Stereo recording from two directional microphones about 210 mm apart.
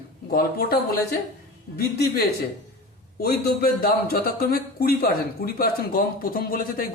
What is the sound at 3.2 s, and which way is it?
A man's voice, 50° left (ahead or behind).